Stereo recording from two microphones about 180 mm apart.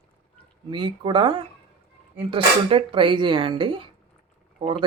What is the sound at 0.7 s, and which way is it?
Speech, 25° right (ahead or behind).